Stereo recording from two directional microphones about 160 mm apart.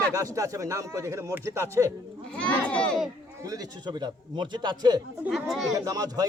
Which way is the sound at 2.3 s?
10° left (ahead or behind).